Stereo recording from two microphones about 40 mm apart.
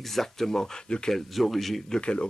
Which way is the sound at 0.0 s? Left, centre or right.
Centre.